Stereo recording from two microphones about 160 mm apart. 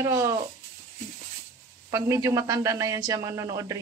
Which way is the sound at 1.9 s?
20° right (ahead or behind).